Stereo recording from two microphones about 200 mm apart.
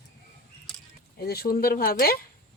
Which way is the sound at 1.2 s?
50° left (ahead or behind).